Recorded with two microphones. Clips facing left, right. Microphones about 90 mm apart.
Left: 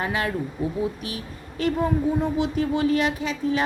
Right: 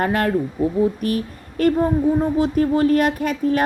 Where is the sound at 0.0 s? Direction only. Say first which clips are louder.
Right 7 dB; 50° right (ahead or behind).